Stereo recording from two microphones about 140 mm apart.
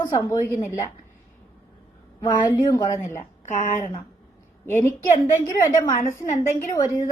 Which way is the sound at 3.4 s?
65° left (ahead or behind).